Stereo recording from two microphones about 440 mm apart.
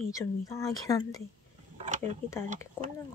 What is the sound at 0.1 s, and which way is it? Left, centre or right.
Speech, centre.